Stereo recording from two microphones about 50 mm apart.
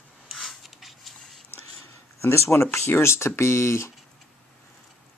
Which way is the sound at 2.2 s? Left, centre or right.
Left.